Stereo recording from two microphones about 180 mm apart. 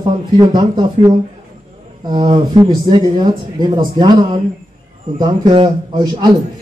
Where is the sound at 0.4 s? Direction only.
25° right (ahead or behind).